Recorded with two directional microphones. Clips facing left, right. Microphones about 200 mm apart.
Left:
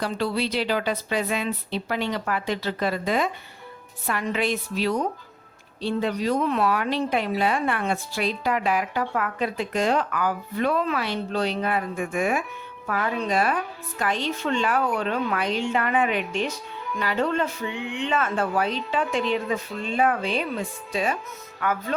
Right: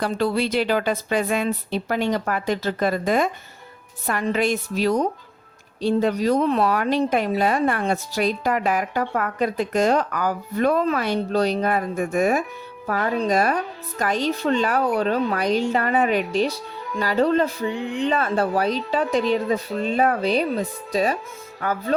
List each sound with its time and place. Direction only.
0.0 s a woman's voice: 45° right (ahead or behind)